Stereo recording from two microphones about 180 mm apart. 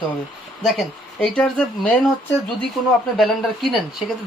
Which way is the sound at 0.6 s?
Centre (ahead or behind).